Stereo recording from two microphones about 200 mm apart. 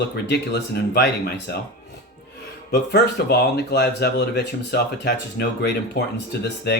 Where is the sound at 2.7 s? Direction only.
55° left (ahead or behind).